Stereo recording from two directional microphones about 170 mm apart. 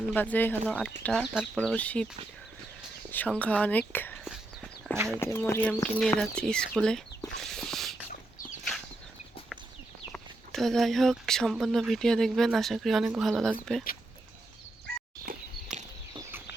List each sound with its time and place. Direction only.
0.1 s speech: 10° left (ahead or behind)
1.5 s speech: 10° left (ahead or behind)
3.1 s speech: 10° left (ahead or behind)
4.2 s walk: centre (ahead or behind)
5.2 s speech: 15° left (ahead or behind)
7.4 s a sound: centre (ahead or behind)
10.1 s speech: centre (ahead or behind)
15.3 s walk: 45° right (ahead or behind)